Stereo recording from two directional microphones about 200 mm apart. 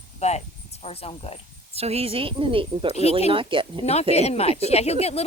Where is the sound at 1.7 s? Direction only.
30° right (ahead or behind).